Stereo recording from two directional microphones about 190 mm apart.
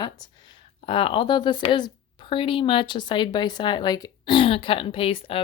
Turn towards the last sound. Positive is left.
turn(degrees=30)  # may be behind; listen again after turning